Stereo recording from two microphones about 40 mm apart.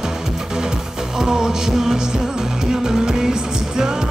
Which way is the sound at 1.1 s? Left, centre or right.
Centre.